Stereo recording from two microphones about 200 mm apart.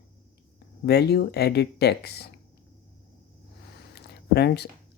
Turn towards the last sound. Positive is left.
turn(degrees=55)  # may be behind; listen again after turning